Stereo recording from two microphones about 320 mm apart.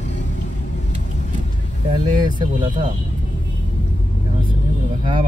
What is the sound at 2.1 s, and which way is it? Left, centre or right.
Speech, centre.